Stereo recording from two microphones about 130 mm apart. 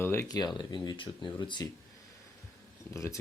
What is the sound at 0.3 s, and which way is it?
Speech, 35° left (ahead or behind).